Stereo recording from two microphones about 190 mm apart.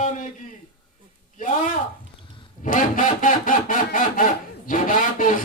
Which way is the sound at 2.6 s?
45° left (ahead or behind).